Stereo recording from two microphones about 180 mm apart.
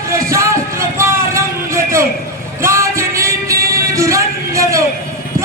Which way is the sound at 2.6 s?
15° right (ahead or behind).